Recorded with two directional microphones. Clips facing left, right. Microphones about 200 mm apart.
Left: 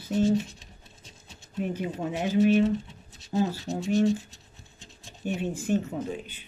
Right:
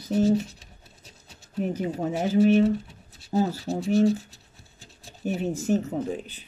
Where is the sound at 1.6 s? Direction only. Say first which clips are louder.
Right 3 dB; 40° right (ahead or behind).